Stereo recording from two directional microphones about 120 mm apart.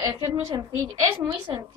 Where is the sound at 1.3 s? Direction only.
45° right (ahead or behind).